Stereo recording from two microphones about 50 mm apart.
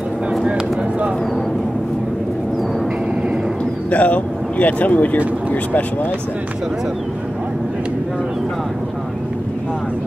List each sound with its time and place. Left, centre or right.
3.9 s speech: left